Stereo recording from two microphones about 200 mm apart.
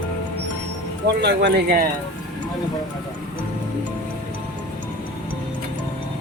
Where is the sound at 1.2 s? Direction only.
55° right (ahead or behind).